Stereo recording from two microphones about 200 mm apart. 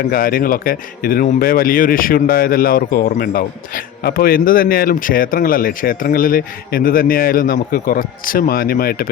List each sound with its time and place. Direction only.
0.1 s speech: 45° left (ahead or behind)